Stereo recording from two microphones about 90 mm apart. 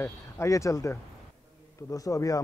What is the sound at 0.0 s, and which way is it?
A man's voice, 35° left (ahead or behind).